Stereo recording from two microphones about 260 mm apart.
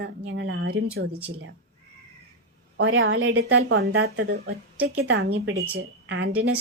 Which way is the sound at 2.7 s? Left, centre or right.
Right.